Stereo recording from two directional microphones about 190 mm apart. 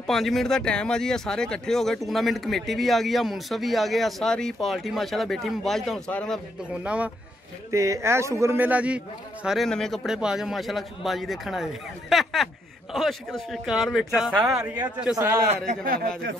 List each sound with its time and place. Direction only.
0.0 s speech: centre (ahead or behind)
15.1 s a man's voice: 15° right (ahead or behind)
15.7 s a man's voice: 50° right (ahead or behind)